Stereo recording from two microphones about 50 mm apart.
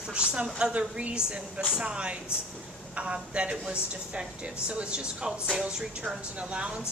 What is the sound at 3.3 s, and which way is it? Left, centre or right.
A woman's voice, right.